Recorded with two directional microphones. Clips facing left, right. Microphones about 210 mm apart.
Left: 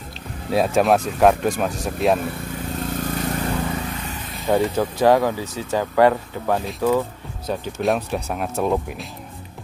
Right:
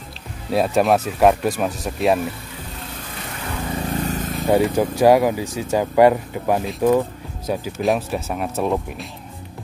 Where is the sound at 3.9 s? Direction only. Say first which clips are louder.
Right 8 dB; 40° right (ahead or behind).